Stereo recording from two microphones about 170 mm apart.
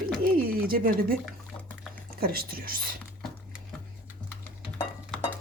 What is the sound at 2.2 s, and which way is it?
Speech, 60° right (ahead or behind).